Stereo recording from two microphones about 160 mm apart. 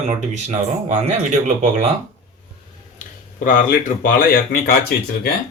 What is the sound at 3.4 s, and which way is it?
Speech, 55° left (ahead or behind).